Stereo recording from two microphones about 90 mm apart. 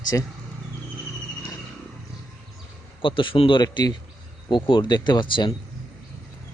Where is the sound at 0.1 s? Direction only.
30° left (ahead or behind).